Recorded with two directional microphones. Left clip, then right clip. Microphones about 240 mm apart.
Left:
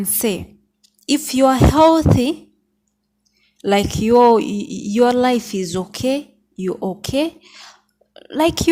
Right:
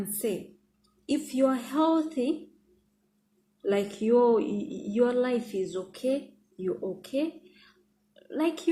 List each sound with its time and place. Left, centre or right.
1.0 s a woman's voice: left
3.6 s a woman's voice: left